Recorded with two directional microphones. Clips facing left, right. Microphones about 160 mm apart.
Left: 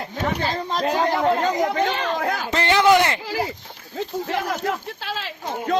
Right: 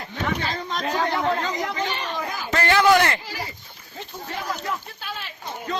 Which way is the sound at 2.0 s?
90° left.